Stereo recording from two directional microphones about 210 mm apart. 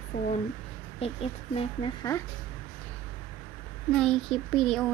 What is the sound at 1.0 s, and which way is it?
Speech, 25° left (ahead or behind).